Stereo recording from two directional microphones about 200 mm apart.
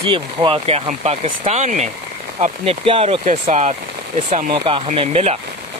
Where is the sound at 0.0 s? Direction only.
25° right (ahead or behind).